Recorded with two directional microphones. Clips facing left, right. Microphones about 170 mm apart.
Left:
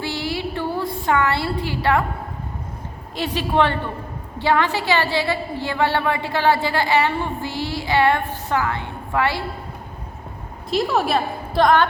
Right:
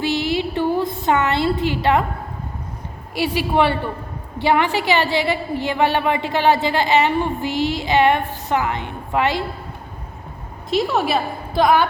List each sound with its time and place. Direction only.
0.0 s a sound: 20° right (ahead or behind)
3.2 s a woman's voice: 10° right (ahead or behind)
10.7 s a woman's voice: centre (ahead or behind)